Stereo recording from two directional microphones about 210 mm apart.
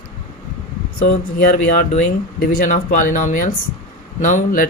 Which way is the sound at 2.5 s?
40° left (ahead or behind).